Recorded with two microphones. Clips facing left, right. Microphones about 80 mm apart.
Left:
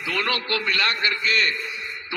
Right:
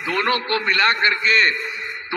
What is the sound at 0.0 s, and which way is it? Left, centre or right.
A man's voice, right.